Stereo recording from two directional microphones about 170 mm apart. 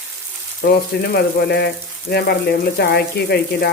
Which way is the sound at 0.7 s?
65° left (ahead or behind).